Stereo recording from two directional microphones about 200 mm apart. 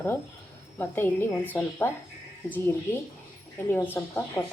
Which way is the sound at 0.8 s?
10° left (ahead or behind).